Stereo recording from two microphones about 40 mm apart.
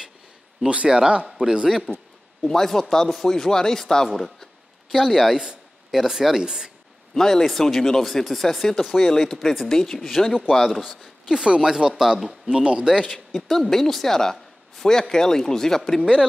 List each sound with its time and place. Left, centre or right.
0.8 s a man's voice: centre
2.4 s a woman's voice: centre
6.4 s speech: centre
7.2 s a woman's voice: centre
10.7 s speech: centre
12.4 s speech: right
13.3 s a woman's voice: centre
16.0 s speech: centre